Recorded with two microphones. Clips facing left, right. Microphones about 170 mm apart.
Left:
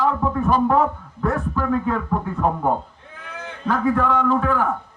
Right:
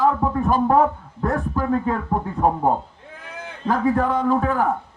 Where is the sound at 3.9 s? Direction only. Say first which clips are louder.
Even; 40° right (ahead or behind).